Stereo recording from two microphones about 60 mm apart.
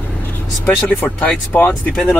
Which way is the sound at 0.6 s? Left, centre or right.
Left.